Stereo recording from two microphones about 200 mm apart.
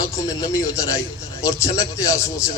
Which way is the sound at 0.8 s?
15° left (ahead or behind).